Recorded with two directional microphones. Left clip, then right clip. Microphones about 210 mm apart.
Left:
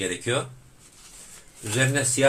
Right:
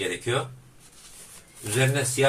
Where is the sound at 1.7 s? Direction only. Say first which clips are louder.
Even; 30° left (ahead or behind).